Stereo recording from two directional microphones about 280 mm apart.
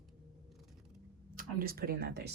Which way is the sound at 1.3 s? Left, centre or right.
Right.